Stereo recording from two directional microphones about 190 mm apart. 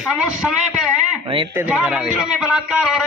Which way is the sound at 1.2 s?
25° right (ahead or behind).